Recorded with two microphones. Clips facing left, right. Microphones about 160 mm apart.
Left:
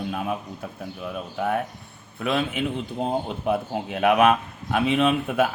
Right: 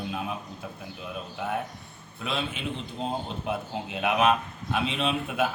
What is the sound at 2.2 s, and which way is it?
Speech, 55° left (ahead or behind).